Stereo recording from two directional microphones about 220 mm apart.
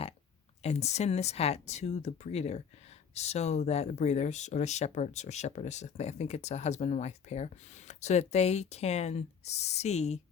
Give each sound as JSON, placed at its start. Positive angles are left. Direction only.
{"t": 0.6, "sound": "speech", "side_deg": 30}